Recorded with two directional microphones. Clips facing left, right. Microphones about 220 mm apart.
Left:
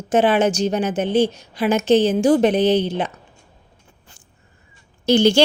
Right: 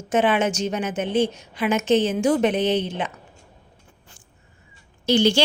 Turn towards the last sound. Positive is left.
turn(degrees=45)  # may be behind; listen again after turning